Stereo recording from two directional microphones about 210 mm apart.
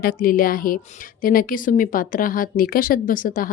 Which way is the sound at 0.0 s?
45° left (ahead or behind).